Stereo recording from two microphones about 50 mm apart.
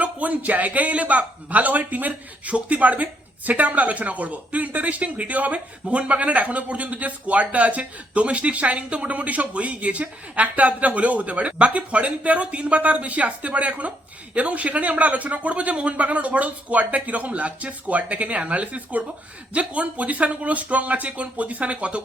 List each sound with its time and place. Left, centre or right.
0.0 s a man's voice: right